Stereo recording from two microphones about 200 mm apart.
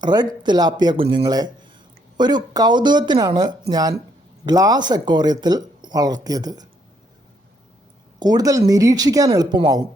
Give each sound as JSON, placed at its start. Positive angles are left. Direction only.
{"t": 0.0, "sound": "speech", "side_deg": -20}
{"t": 8.2, "sound": "speech", "side_deg": -20}